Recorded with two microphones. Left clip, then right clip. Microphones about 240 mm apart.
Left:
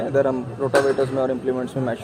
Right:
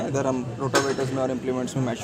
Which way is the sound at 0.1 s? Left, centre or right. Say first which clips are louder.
Left 6 dB; right.